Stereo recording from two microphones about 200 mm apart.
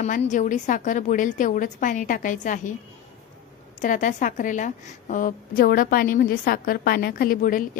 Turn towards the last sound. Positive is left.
turn(degrees=45)  # may be behind; listen again after turning